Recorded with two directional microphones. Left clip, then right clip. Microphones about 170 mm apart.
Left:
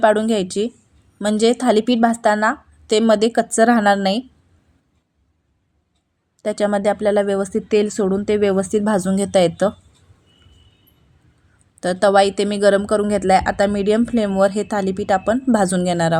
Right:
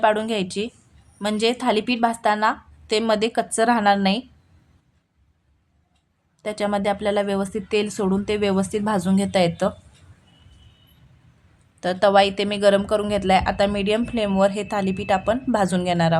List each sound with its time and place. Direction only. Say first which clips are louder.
0.0 s a woman's voice: left 4 dB; 25° left (ahead or behind)
6.4 s a woman's voice: left 5 dB; 25° left (ahead or behind)
11.8 s a woman's voice: left 2 dB; 25° left (ahead or behind)